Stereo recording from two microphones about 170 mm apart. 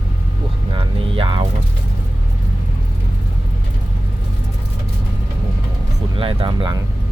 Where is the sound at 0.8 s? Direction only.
30° right (ahead or behind).